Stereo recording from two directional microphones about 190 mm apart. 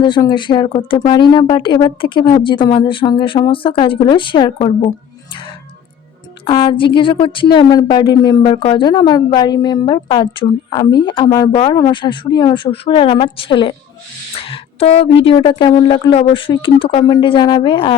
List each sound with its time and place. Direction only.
0.0 s speech: 25° left (ahead or behind)
6.4 s speech: 25° left (ahead or behind)